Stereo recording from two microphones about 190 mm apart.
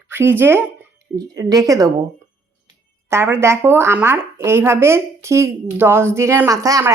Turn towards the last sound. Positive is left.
turn(degrees=-15)  # may be behind; listen again after turning